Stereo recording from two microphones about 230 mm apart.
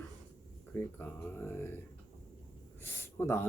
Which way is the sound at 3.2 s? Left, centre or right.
Centre.